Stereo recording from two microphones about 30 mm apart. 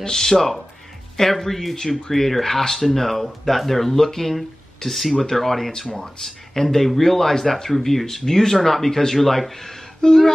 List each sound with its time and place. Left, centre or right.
0.0 s speech: centre
10.0 s speech: left